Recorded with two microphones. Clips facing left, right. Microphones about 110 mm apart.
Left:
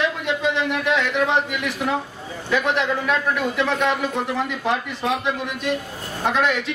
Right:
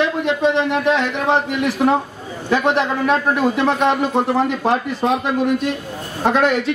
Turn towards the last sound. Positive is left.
turn(degrees=-35)  # may be behind; listen again after turning